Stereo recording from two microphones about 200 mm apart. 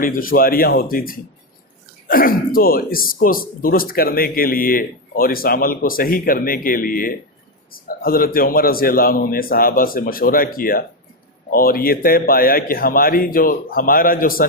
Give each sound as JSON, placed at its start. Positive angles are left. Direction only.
{"t": 0.0, "sound": "speech", "side_deg": 45}